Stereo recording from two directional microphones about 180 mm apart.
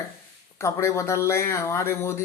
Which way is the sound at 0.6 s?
15° left (ahead or behind).